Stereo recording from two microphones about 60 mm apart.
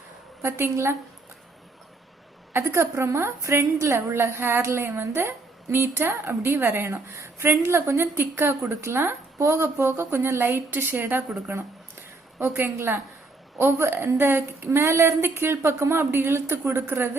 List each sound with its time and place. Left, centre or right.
0.4 s a woman's voice: right
2.5 s a woman's voice: right